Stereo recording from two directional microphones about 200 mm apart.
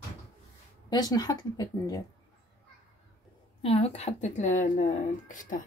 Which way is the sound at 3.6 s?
30° left (ahead or behind).